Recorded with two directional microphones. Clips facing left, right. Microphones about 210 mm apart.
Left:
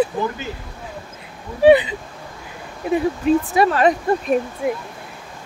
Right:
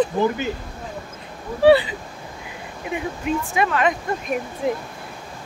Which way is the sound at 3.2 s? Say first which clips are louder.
Left 5 dB; 35° left (ahead or behind).